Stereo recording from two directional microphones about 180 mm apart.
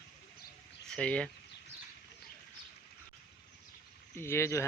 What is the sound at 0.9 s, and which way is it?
Speech, 5° left (ahead or behind).